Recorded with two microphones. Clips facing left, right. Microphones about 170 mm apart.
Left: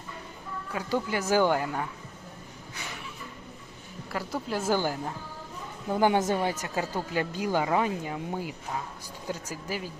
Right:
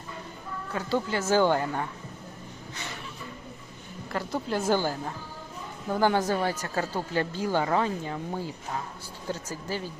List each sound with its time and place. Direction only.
0.7 s a woman's voice: 15° left (ahead or behind)
4.1 s a woman's voice: 10° left (ahead or behind)